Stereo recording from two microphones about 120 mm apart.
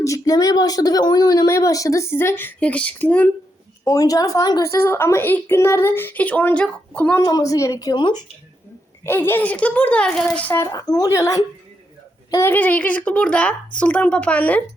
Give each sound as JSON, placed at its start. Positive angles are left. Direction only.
{"t": 0.0, "sound": "a woman's voice", "side_deg": 30}
{"t": 3.8, "sound": "a woman's voice", "side_deg": 30}
{"t": 7.3, "sound": "speech", "side_deg": 30}
{"t": 9.0, "sound": "speech", "side_deg": 20}
{"t": 10.6, "sound": "a woman's voice", "side_deg": 30}